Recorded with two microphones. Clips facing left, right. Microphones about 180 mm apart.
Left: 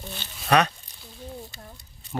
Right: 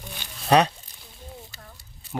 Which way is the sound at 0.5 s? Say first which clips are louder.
Right 2 dB; 30° right (ahead or behind).